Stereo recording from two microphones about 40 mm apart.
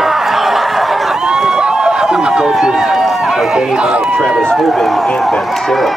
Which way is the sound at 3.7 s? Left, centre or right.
Right.